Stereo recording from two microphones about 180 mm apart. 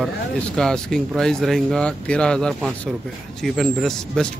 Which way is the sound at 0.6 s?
5° left (ahead or behind).